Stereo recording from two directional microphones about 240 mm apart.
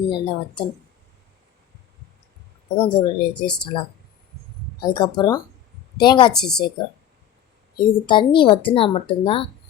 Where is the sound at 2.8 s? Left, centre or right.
Centre.